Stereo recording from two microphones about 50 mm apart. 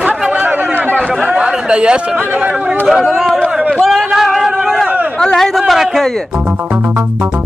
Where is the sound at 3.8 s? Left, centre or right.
Centre.